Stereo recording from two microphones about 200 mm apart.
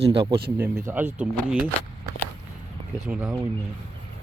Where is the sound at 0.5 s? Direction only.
10° right (ahead or behind).